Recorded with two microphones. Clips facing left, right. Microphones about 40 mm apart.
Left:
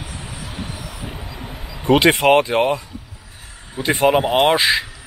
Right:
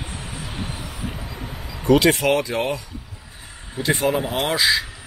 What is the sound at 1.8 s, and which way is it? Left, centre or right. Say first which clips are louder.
Speech: left 3 dB; left.